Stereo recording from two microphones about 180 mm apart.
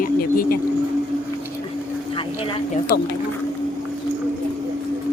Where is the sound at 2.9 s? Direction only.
55° left (ahead or behind).